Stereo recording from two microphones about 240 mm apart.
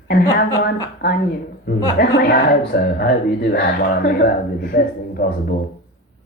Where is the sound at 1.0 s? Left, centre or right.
Left.